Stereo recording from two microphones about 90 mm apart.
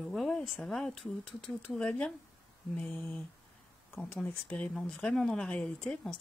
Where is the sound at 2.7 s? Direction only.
25° left (ahead or behind).